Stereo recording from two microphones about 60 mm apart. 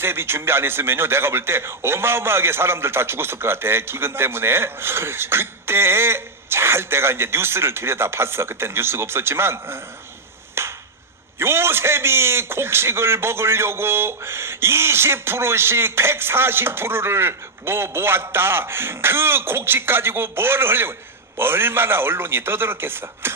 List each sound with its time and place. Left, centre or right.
0.0 s a man's voice: right
10.6 s a sound: right
11.3 s a man's voice: right